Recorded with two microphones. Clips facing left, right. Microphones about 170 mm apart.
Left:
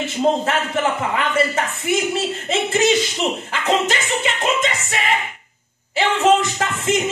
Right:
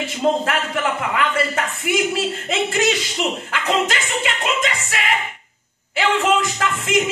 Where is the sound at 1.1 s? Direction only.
25° left (ahead or behind).